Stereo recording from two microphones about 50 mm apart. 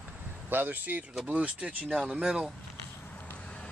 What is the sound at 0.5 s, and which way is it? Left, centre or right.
Speech, right.